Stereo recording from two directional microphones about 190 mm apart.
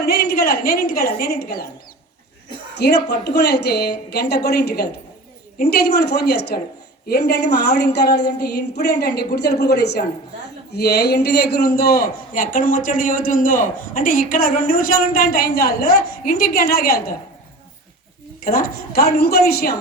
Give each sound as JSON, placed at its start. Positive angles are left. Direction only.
{"t": 0.0, "sound": "a woman's voice", "side_deg": 55}
{"t": 2.7, "sound": "a man's voice", "side_deg": 60}
{"t": 18.4, "sound": "a man's voice", "side_deg": 50}